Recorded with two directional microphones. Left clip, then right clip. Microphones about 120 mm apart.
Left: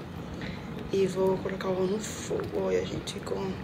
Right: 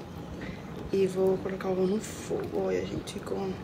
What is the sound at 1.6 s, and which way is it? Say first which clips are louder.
Speech: even; centre (ahead or behind).